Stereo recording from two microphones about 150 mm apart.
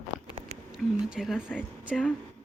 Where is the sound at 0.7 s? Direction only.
5° right (ahead or behind).